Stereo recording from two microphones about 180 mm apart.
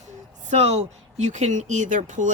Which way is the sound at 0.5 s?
35° right (ahead or behind).